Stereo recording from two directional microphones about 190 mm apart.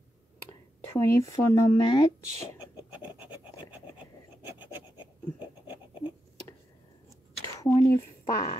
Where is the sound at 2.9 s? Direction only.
10° right (ahead or behind).